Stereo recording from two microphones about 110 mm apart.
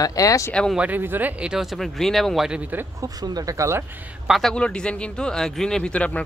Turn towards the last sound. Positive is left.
turn(degrees=10)  # may be behind; listen again after turning